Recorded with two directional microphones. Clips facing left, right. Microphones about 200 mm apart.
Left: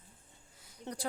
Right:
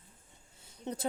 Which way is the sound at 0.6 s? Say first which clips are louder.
Right 3 dB; 25° right (ahead or behind).